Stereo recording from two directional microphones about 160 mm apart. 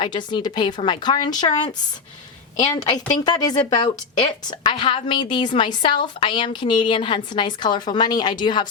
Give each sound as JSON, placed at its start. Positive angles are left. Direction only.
{"t": 0.0, "sound": "a woman's voice", "side_deg": 30}